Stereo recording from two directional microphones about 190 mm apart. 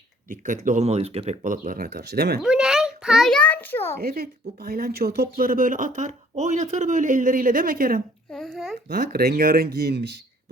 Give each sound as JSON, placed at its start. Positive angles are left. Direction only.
{"t": 0.3, "sound": "speech", "side_deg": -40}
{"t": 2.4, "sound": "a child's voice", "side_deg": -5}
{"t": 4.0, "sound": "speech", "side_deg": -55}
{"t": 8.3, "sound": "a child's voice", "side_deg": 0}
{"t": 8.9, "sound": "speech", "side_deg": -50}